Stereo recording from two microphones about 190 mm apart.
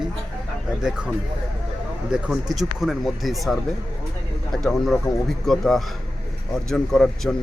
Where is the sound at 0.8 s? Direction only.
5° right (ahead or behind).